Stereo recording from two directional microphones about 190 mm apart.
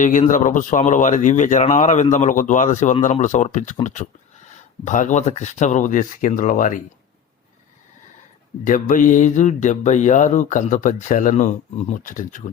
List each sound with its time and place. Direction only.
0.0 s speech: 45° left (ahead or behind)
4.9 s speech: 40° left (ahead or behind)
8.6 s speech: 45° left (ahead or behind)